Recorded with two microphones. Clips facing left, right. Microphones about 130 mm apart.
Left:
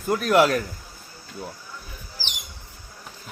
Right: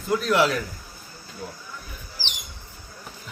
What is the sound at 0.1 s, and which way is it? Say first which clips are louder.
Speech: left 2 dB; 50° left (ahead or behind).